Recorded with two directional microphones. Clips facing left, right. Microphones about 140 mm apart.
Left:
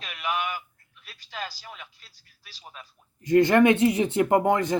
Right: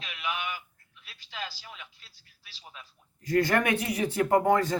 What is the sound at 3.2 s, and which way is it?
Speech, 20° left (ahead or behind).